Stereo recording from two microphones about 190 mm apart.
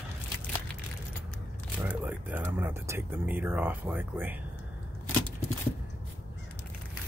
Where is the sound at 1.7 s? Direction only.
10° right (ahead or behind).